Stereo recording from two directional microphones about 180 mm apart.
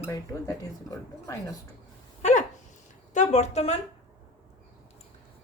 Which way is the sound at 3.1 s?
40° left (ahead or behind).